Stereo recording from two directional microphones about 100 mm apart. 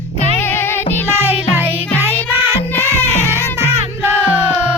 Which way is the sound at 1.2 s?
20° right (ahead or behind).